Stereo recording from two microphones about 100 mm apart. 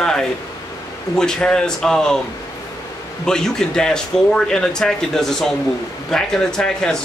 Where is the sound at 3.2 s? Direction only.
5° left (ahead or behind).